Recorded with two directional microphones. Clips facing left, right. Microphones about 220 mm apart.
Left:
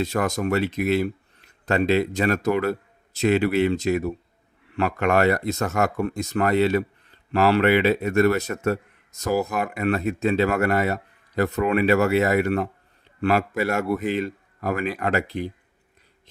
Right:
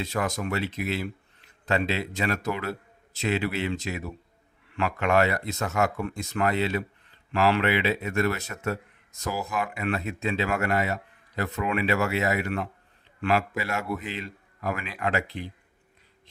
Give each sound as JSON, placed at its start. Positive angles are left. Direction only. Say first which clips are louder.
{"t": 0.0, "sound": "speech", "louder": "left 5 dB", "side_deg": 45}